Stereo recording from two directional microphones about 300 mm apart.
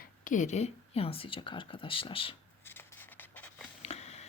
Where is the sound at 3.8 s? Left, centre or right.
Left.